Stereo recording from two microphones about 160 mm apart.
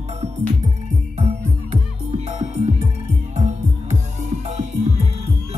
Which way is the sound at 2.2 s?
40° right (ahead or behind).